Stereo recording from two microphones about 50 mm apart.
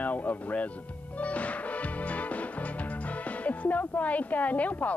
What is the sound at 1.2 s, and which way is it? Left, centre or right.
Music, left.